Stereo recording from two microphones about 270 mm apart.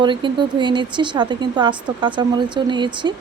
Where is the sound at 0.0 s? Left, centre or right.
Centre.